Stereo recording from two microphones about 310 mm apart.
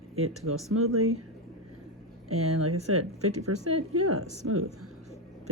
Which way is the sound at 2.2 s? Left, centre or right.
Right.